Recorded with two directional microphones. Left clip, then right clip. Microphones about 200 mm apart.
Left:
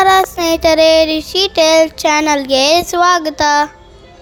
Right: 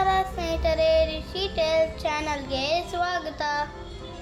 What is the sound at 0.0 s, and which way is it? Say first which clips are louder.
Child singing: left 13 dB; 55° left (ahead or behind).